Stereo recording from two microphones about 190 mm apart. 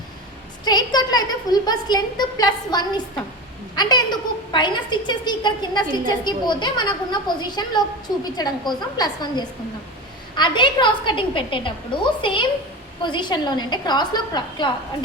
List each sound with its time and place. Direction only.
0.6 s a woman's voice: 20° left (ahead or behind)